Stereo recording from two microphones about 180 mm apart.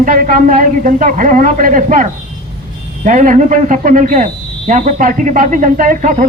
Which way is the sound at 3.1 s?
45° right (ahead or behind).